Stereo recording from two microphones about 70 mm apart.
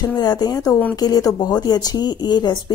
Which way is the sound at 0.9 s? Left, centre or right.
Left.